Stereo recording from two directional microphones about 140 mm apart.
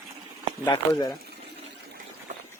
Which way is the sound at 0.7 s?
30° left (ahead or behind).